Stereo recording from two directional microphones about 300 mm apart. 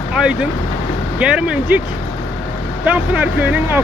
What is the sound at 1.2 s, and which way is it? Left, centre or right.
Speech, centre.